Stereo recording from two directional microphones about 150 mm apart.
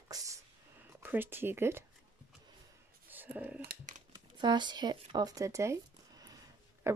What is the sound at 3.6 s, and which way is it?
Dog, 85° right.